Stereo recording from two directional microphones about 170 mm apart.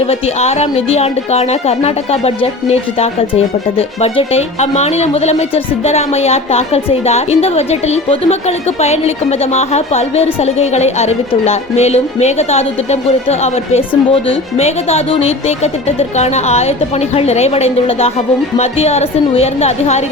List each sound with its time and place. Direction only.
0.0 s speech: 35° left (ahead or behind)